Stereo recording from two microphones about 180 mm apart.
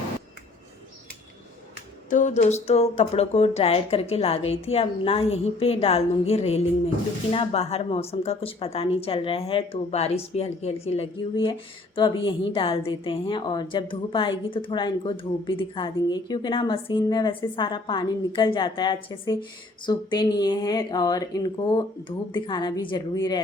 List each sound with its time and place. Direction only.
2.0 s a woman's voice: 45° left (ahead or behind); by 23.4 s 20° left (ahead or behind)